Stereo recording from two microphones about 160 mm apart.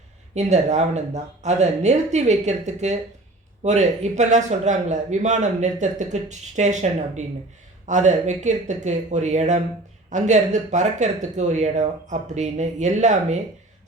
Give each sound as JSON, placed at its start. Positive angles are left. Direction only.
{"t": 0.3, "sound": "a man's voice", "side_deg": -45}